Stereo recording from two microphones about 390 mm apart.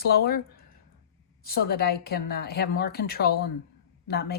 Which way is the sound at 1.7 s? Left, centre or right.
Left.